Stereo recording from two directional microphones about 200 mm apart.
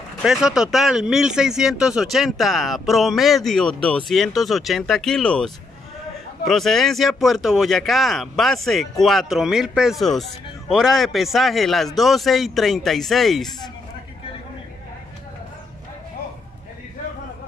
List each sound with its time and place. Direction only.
0.2 s speech: 5° right (ahead or behind)